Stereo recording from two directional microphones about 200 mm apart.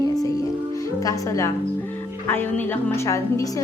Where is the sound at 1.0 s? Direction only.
15° left (ahead or behind).